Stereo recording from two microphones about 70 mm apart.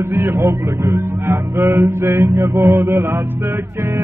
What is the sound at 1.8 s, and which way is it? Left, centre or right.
Music, right.